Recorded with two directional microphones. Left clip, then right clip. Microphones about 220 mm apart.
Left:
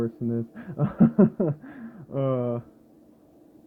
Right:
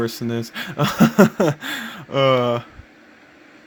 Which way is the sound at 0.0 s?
40° right (ahead or behind).